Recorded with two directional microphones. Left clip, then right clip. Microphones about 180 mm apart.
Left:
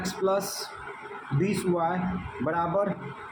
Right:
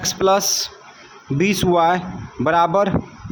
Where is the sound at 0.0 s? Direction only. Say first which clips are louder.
Right 10 dB; 45° right (ahead or behind).